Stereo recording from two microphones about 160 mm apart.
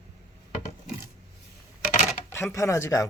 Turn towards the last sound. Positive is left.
turn(degrees=20)  # may be behind; listen again after turning